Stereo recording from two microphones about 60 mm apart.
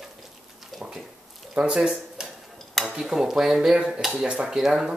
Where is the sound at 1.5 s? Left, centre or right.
Centre.